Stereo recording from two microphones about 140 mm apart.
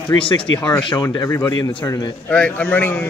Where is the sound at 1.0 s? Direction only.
20° left (ahead or behind).